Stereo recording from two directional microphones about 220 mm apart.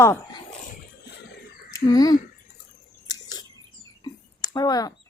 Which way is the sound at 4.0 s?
20° left (ahead or behind).